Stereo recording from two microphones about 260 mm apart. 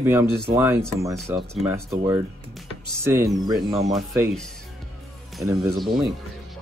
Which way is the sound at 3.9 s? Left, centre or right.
Centre.